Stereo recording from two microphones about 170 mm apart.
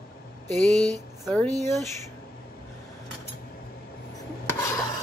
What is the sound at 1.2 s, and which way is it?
Speech, 5° left (ahead or behind).